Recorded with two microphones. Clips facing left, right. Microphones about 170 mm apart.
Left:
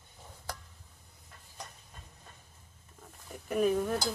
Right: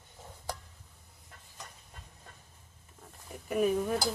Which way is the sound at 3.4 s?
5° right (ahead or behind).